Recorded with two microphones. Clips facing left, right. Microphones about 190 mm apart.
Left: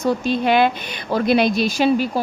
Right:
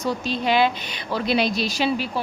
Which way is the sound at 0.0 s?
55° left (ahead or behind).